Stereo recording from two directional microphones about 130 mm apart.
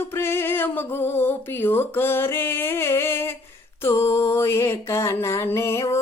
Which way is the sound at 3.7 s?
20° left (ahead or behind).